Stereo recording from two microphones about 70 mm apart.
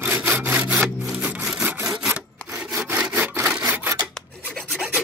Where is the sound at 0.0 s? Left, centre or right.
Right.